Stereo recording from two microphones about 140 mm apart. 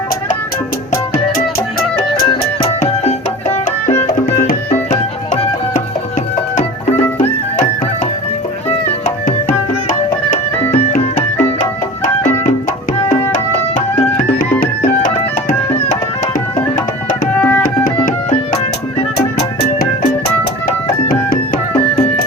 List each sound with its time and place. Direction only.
2.0 s music: 45° left (ahead or behind)
4.1 s music: 75° left (ahead or behind)
4.7 s music: 55° left (ahead or behind)
14.8 s music: 70° left (ahead or behind)
17.3 s tabla: 10° left (ahead or behind)
18.3 s music: 40° left (ahead or behind)
21.1 s music: 90° left